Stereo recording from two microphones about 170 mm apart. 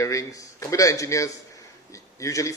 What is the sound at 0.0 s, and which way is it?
A man's voice, 20° left (ahead or behind).